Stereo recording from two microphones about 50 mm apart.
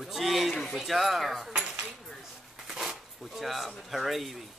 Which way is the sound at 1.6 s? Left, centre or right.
Right.